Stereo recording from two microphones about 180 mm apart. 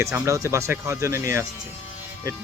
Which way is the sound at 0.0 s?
15° right (ahead or behind).